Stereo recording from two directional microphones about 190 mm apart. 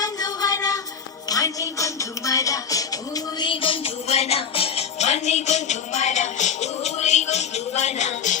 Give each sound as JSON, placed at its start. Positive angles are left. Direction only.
{"t": 0.0, "sound": "music", "side_deg": 20}
{"t": 1.3, "sound": "a sound", "side_deg": 20}
{"t": 3.4, "sound": "music", "side_deg": 25}